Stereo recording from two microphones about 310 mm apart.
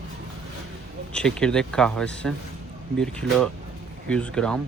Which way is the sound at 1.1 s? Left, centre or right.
Centre.